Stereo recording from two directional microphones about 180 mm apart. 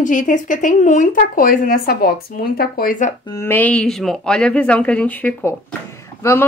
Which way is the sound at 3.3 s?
10° left (ahead or behind).